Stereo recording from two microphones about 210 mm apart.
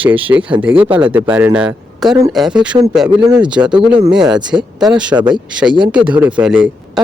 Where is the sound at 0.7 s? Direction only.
25° right (ahead or behind).